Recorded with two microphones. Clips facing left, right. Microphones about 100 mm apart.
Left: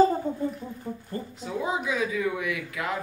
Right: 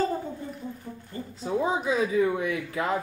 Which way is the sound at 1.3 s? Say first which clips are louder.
Right 4 dB; 30° right (ahead or behind).